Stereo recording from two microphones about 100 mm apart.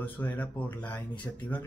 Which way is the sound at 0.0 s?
15° left (ahead or behind).